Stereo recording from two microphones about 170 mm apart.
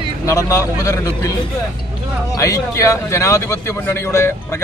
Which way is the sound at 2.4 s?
20° left (ahead or behind).